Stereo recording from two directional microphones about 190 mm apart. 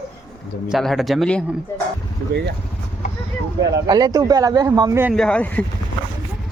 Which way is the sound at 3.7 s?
20° right (ahead or behind).